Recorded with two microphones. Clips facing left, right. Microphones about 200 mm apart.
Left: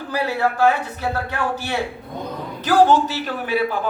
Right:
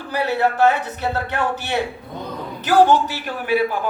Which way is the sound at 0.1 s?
20° right (ahead or behind).